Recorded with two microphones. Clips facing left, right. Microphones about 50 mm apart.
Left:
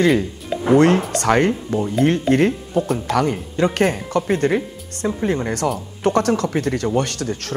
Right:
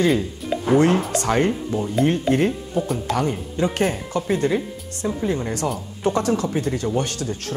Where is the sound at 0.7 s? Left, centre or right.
Left.